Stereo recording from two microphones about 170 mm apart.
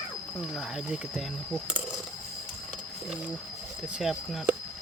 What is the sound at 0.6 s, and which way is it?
Speech, 5° right (ahead or behind).